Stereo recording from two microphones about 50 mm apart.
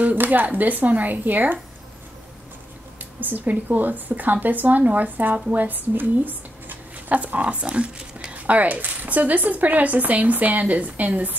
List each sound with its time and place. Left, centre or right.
0.0 s a woman's voice: right
3.2 s a woman's voice: right